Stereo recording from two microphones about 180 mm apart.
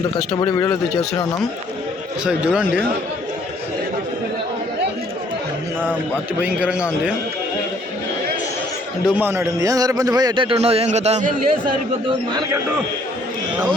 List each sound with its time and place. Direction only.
2.2 s a man's voice: 5° right (ahead or behind)
6.4 s a man's voice: 5° right (ahead or behind)
9.0 s a man's voice: 10° right (ahead or behind); by 11.5 s 40° right (ahead or behind)
12.3 s a man's voice: 25° right (ahead or behind)